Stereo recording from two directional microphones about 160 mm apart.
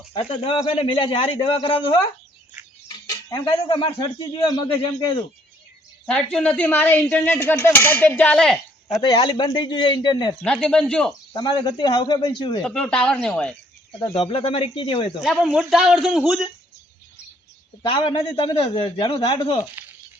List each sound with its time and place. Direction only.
0.1 s a man's voice: 35° left (ahead or behind)
3.1 s a man's voice: 25° left (ahead or behind)
6.3 s speech: 5° left (ahead or behind)
9.0 s a man's voice: 30° left (ahead or behind)
10.4 s a man's voice: 5° left (ahead or behind)
11.3 s a man's voice: 25° left (ahead or behind)
12.6 s speech: 5° left (ahead or behind)
14.0 s a man's voice: 35° left (ahead or behind)
15.2 s a man's voice: 5° right (ahead or behind)
17.8 s a man's voice: 30° left (ahead or behind)